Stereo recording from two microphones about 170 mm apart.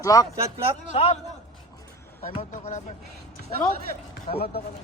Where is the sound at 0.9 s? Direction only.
30° left (ahead or behind).